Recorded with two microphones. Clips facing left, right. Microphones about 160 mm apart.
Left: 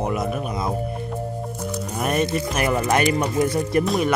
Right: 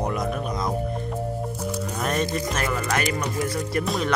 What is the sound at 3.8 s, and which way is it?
Music, centre (ahead or behind).